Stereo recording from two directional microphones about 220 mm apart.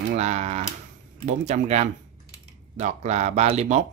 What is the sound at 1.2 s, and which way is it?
Speech, 30° right (ahead or behind).